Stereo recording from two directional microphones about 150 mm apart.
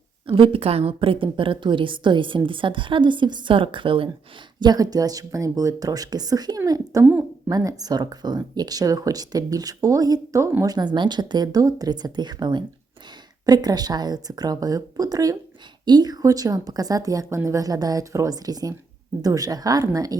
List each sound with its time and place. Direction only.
0.3 s a woman's voice: 35° right (ahead or behind)
7.0 s a sound: 15° right (ahead or behind)
7.5 s speech: 25° right (ahead or behind)